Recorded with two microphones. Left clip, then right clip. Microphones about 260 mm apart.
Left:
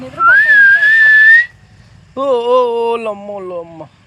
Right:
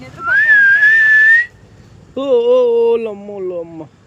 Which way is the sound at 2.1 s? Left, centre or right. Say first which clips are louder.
Even; centre.